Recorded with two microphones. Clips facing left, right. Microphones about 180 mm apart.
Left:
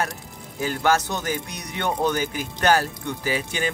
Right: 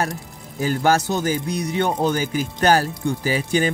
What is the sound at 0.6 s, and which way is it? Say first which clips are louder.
Speech: right 3 dB; 40° right (ahead or behind).